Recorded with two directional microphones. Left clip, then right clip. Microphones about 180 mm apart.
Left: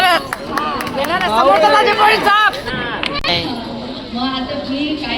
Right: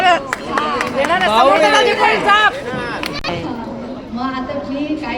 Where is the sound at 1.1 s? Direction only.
15° right (ahead or behind).